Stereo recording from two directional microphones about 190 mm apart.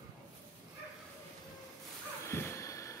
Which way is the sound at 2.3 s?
15° left (ahead or behind).